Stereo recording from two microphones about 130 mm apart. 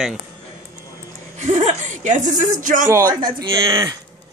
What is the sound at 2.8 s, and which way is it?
Speech, 30° right (ahead or behind).